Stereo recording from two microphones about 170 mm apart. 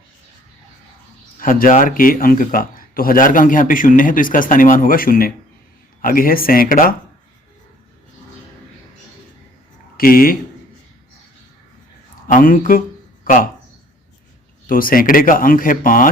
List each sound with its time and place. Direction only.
1.4 s speech: 55° left (ahead or behind)
10.0 s speech: 60° left (ahead or behind)
12.3 s speech: 55° left (ahead or behind)
14.7 s speech: 55° left (ahead or behind)